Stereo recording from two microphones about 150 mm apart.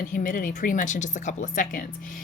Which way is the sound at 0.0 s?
65° left (ahead or behind).